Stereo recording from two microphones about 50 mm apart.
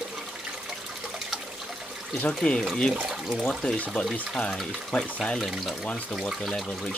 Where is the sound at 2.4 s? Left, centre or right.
Centre.